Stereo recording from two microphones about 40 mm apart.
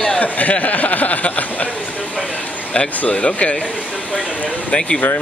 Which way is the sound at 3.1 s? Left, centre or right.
Left.